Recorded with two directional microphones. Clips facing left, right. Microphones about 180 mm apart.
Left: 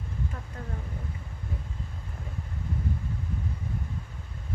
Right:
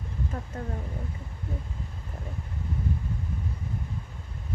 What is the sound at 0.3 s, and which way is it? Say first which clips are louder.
Speech: right 6 dB; 45° right (ahead or behind).